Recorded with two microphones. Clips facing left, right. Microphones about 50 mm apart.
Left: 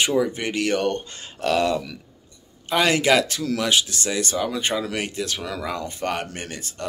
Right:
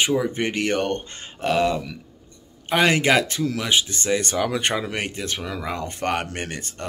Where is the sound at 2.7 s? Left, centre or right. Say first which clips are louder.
Even; right.